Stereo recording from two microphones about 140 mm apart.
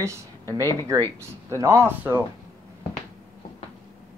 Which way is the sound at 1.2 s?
20° right (ahead or behind).